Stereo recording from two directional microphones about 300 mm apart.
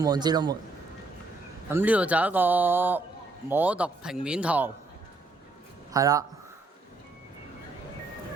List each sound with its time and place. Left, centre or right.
0.0 s a man's voice: centre
1.7 s speech: centre
5.9 s a man's voice: centre